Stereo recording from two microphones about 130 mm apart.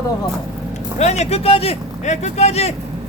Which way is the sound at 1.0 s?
60° left (ahead or behind).